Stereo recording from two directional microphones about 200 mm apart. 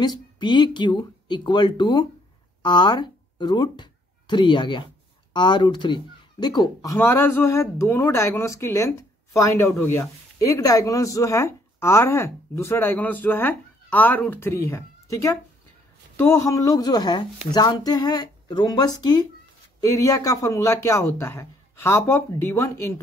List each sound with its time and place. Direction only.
0.0 s speech: 20° left (ahead or behind)